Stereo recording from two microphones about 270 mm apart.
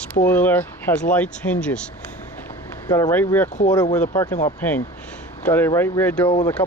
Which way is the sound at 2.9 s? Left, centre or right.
Centre.